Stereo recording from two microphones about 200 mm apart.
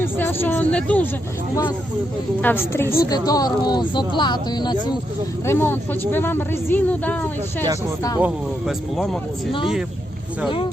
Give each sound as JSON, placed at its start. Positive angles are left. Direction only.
{"t": 0.0, "sound": "a woman's voice", "side_deg": 10}
{"t": 2.4, "sound": "a woman's voice", "side_deg": 10}
{"t": 5.5, "sound": "a woman's voice", "side_deg": 10}
{"t": 8.2, "sound": "speech", "side_deg": 0}